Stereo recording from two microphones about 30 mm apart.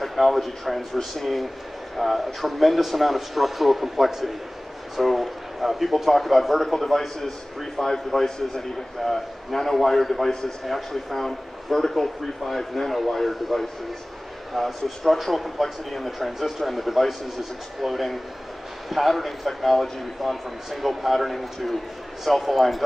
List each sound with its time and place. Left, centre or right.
0.0 s a man's voice: centre
7.7 s a man's voice: centre